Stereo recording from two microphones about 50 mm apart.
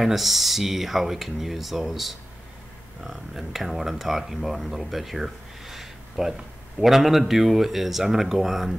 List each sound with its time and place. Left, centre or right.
0.0 s speech: centre